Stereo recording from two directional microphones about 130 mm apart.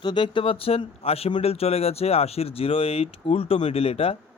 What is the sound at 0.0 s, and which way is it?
Speech, 35° left (ahead or behind).